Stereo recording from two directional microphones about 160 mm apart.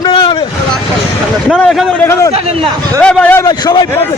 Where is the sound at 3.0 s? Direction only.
10° left (ahead or behind).